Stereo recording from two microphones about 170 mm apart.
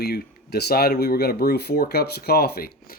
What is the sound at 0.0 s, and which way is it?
Speech, 70° left (ahead or behind).